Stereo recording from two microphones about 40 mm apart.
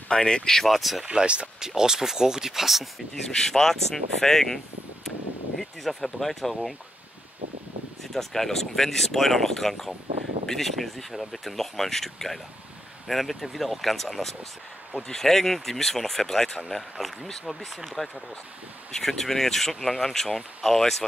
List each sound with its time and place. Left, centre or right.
0.1 s speech: centre
0.7 s speech: centre
1.0 s speech: right
1.8 s speech: centre
3.3 s speech: centre
5.6 s speech: centre
8.0 s speech: centre
16.6 s speech: centre